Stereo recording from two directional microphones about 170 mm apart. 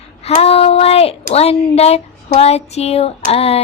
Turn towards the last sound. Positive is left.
turn(degrees=35)  # may be behind; listen again after turning